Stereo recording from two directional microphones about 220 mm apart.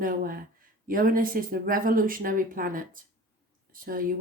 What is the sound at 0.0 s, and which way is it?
Speech, 40° right (ahead or behind).